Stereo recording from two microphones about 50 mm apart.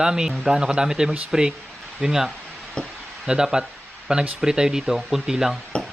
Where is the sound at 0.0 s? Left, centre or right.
Centre.